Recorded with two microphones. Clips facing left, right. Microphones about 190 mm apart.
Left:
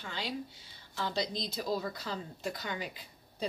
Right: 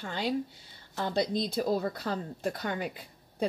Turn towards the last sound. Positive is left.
turn(degrees=-55)  # may be behind; listen again after turning